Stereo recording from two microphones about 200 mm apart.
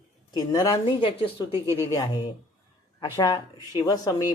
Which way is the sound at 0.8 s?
25° left (ahead or behind).